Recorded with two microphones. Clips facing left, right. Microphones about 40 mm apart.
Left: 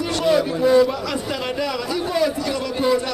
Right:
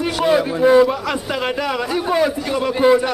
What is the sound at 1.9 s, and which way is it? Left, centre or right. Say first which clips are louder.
Speech: right 4 dB; right.